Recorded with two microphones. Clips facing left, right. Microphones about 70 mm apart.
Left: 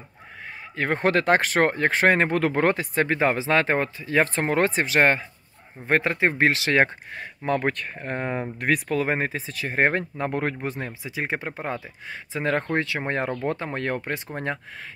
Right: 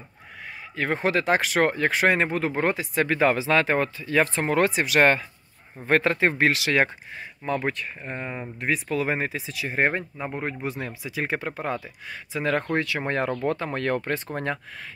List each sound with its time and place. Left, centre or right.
0.7 s speech: left
3.2 s speech: left
6.3 s speech: left
7.2 s speech: left
10.6 s speech: left
11.1 s speech: left